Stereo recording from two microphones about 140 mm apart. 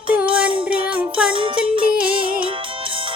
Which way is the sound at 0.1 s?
10° right (ahead or behind).